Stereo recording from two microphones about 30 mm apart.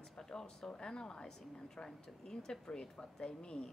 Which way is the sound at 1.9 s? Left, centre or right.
Centre.